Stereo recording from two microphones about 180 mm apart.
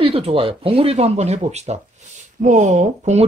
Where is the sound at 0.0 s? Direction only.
30° right (ahead or behind).